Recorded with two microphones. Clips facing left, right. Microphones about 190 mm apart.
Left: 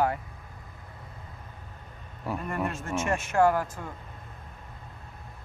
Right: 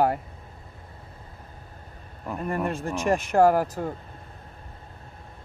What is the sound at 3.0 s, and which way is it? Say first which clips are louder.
Speech: right 4 dB; 35° right (ahead or behind).